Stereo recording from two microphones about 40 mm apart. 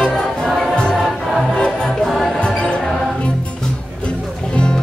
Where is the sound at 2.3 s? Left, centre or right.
Left.